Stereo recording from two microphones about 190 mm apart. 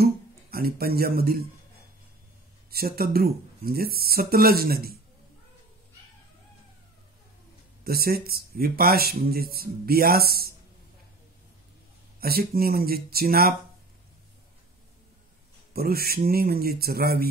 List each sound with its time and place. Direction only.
0.0 s speech: 55° right (ahead or behind)
2.7 s speech: 55° right (ahead or behind)
7.8 s speech: 55° right (ahead or behind)
12.2 s speech: 50° right (ahead or behind)
15.7 s speech: 50° right (ahead or behind)